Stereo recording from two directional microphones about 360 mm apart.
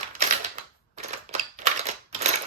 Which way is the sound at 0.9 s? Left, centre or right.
Centre.